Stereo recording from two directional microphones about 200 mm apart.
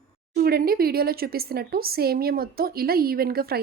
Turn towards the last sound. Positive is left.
turn(degrees=-50)  # may be behind; listen again after turning